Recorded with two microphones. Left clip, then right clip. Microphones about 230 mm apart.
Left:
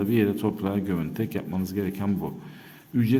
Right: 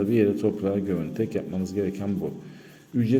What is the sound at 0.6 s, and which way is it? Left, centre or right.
A man's voice, left.